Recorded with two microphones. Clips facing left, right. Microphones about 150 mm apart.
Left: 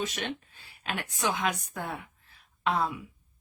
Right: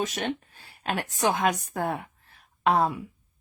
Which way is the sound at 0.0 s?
45° right (ahead or behind).